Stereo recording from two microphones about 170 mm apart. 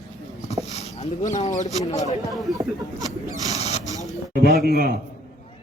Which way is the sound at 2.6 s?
20° right (ahead or behind).